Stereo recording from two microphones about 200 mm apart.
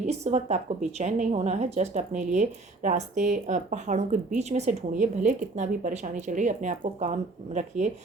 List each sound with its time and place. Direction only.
0.0 s speech: 35° right (ahead or behind)